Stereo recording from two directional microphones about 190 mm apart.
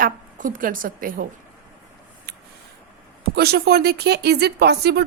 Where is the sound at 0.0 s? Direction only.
45° right (ahead or behind).